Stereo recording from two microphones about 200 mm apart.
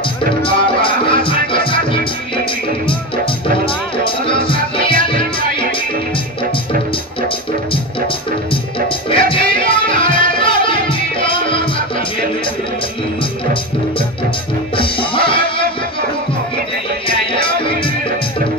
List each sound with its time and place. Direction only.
0.4 s music: 25° left (ahead or behind)
8.5 s music: 25° left (ahead or behind)
14.8 s music: 25° left (ahead or behind)
17.3 s music: 25° left (ahead or behind)